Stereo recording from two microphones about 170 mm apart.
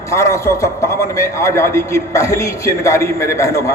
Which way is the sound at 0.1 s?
15° left (ahead or behind).